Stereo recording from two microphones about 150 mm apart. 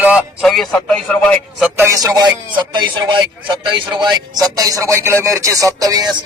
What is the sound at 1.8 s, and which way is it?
Speech, 25° right (ahead or behind).